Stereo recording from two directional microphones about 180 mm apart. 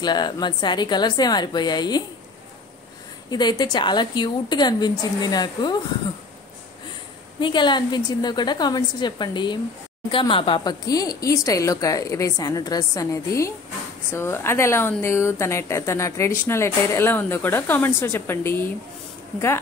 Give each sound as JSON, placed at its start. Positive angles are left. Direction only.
{"t": 0.0, "sound": "speech", "side_deg": 25}
{"t": 3.3, "sound": "speech", "side_deg": 25}
{"t": 7.3, "sound": "a woman's voice", "side_deg": 25}